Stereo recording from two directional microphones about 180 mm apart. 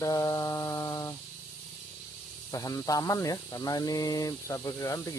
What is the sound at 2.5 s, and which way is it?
Speech, 20° left (ahead or behind).